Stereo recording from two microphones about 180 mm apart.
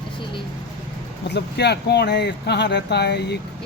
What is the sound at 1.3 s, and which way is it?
Speech, 70° left (ahead or behind).